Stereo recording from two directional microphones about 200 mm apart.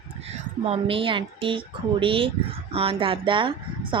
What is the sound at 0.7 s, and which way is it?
Speech, 25° right (ahead or behind).